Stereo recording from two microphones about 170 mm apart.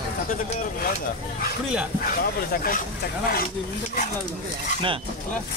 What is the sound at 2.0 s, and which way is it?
Speech, 55° left (ahead or behind).